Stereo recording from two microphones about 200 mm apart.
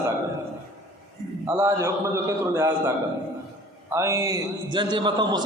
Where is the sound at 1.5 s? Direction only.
10° right (ahead or behind).